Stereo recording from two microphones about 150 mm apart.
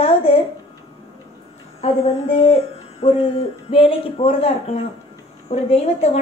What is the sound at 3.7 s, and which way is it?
A woman's voice, 40° left (ahead or behind).